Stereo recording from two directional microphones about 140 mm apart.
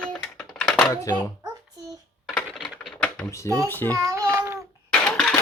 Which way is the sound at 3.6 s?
15° left (ahead or behind).